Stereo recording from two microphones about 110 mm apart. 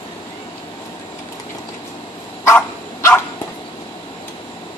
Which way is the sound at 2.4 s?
25° left (ahead or behind).